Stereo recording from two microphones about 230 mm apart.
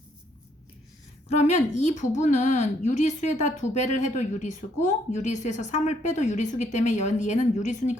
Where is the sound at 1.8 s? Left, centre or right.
Left.